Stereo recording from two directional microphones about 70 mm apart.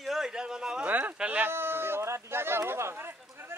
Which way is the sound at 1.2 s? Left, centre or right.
Right.